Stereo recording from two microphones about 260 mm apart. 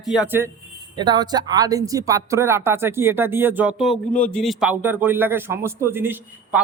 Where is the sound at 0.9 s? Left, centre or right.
Centre.